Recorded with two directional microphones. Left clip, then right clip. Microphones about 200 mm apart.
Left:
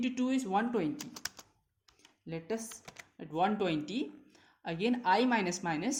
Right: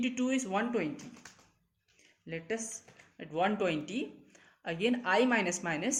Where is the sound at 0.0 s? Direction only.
20° left (ahead or behind).